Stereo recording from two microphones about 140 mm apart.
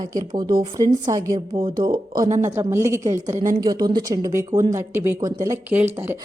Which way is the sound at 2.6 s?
20° right (ahead or behind).